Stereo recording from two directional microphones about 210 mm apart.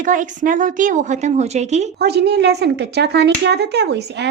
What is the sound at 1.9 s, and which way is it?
Speech, 50° right (ahead or behind).